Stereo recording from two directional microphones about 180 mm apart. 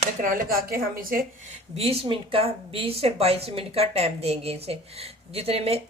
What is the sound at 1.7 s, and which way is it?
A woman's voice, 35° right (ahead or behind).